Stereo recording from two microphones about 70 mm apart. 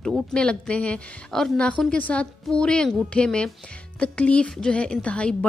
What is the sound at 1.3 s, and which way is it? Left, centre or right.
A woman's voice, centre.